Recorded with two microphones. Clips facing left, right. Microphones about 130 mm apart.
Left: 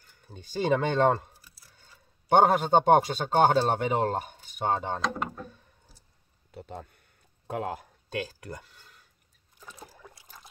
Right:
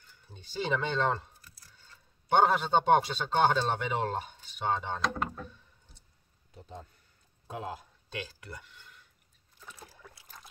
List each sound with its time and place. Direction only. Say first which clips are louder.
0.3 s a man's voice: left 6 dB; 45° left (ahead or behind)
5.0 s speech: left 1 dB; 5° left (ahead or behind)
6.5 s a sound: left 6 dB; 65° left (ahead or behind); by 8.9 s 40° left (ahead or behind)
10.0 s trickle: left 3 dB; 20° left (ahead or behind)